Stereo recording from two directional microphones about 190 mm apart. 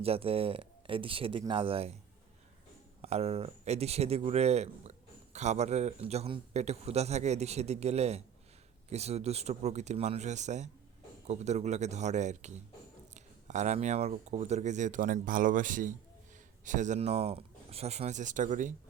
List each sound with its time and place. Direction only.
0.0 s speech: 30° right (ahead or behind)
3.0 s speech: 35° right (ahead or behind)